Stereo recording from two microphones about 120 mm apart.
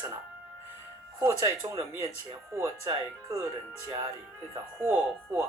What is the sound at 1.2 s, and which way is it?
Speech, 25° right (ahead or behind).